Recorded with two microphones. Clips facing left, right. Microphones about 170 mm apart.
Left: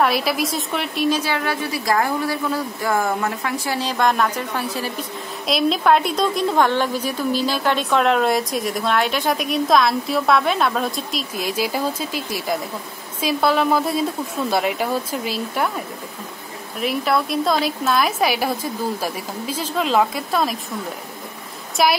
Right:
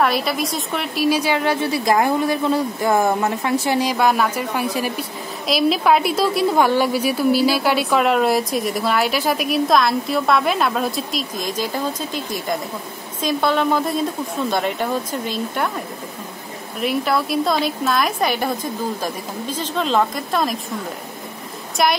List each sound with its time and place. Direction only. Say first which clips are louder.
0.0 s a woman's voice: even; centre (ahead or behind)
16.8 s a woman's voice: even; centre (ahead or behind)
21.8 s a woman's voice: even; centre (ahead or behind)